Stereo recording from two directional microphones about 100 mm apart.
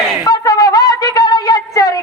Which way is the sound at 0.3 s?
35° left (ahead or behind).